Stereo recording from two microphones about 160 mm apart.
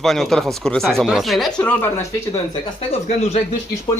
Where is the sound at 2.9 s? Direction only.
40° left (ahead or behind).